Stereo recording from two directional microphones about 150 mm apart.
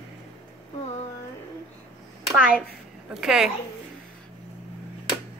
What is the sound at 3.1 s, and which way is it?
Speech, 5° right (ahead or behind).